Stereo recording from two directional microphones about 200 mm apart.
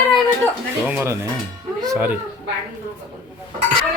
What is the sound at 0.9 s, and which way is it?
Speech, 10° right (ahead or behind).